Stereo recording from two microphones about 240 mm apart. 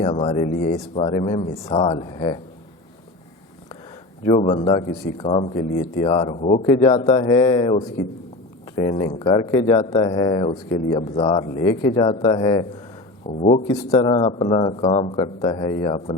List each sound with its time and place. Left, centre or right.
0.0 s speech: left
4.4 s speech: left